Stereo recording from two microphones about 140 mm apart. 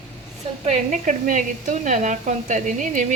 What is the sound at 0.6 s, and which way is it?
Speech, 65° right (ahead or behind).